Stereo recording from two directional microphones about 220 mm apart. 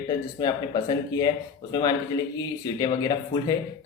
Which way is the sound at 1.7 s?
20° left (ahead or behind).